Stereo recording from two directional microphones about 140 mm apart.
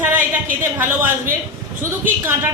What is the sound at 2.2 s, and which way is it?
Speech, 15° right (ahead or behind).